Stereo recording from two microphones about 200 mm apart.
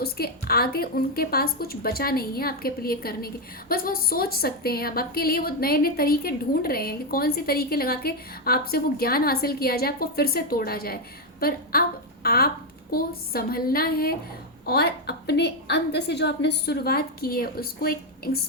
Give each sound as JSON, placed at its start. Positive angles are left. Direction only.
{"t": 0.0, "sound": "a woman's voice", "side_deg": 50}